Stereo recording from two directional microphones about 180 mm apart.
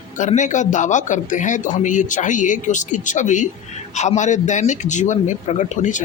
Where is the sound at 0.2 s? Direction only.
40° left (ahead or behind).